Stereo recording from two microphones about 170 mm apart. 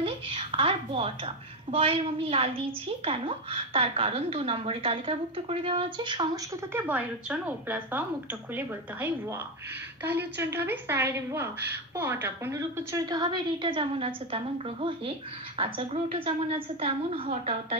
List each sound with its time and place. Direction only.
0.0 s a woman's voice: 30° right (ahead or behind)
6.7 s a woman's voice: 10° right (ahead or behind); by 17.7 s 35° right (ahead or behind)